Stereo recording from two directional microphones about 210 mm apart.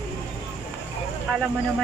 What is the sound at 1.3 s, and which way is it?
Speech, centre (ahead or behind).